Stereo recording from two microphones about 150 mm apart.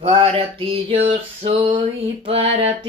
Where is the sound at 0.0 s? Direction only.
40° right (ahead or behind).